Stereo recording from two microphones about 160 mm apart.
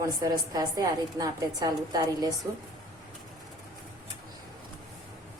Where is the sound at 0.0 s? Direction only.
25° right (ahead or behind).